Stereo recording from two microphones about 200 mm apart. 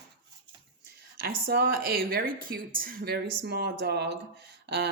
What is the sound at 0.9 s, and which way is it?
Speech, 50° right (ahead or behind).